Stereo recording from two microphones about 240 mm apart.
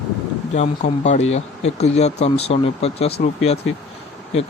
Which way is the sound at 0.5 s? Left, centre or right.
Left.